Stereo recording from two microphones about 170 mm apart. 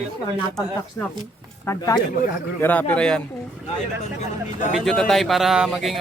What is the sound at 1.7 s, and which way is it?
Speech, 20° left (ahead or behind).